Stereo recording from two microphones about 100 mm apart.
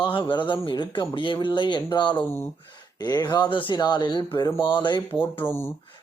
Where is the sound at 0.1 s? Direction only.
55° left (ahead or behind).